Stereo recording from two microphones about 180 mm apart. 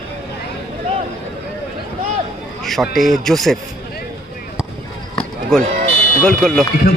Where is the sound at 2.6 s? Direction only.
Centre (ahead or behind).